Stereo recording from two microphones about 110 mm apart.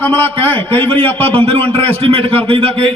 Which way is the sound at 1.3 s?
55° right (ahead or behind).